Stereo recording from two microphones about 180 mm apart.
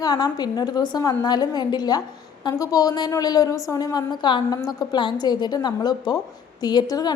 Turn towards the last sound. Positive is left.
turn(degrees=20)  # may be behind; listen again after turning